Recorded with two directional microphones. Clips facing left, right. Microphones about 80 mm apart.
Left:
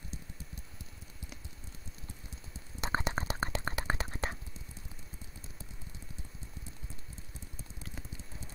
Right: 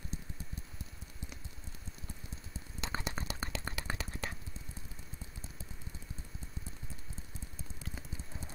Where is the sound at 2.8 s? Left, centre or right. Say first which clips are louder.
Left 6 dB; left.